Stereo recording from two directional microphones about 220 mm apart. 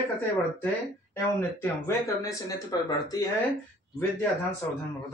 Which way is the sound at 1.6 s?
15° left (ahead or behind).